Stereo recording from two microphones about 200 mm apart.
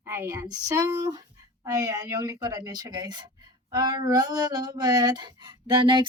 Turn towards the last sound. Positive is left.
turn(degrees=-25)  # may be behind; listen again after turning